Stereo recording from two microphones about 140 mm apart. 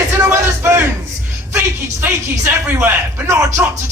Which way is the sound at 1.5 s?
15° right (ahead or behind).